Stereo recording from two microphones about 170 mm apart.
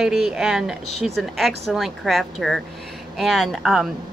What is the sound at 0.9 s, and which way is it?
Speech, 40° left (ahead or behind).